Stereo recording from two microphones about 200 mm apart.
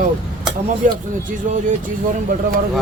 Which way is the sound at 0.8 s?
40° right (ahead or behind).